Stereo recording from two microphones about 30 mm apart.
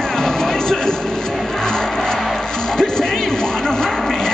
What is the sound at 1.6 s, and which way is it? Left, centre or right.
Music, left.